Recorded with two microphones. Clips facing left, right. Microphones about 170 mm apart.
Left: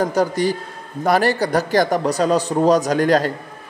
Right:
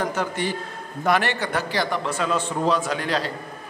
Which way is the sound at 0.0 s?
35° left (ahead or behind).